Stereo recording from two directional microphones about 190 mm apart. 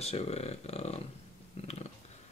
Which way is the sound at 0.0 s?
35° left (ahead or behind).